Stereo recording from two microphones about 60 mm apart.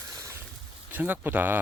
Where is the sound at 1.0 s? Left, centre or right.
Right.